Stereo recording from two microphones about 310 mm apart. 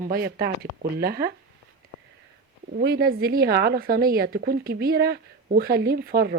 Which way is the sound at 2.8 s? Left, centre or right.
Right.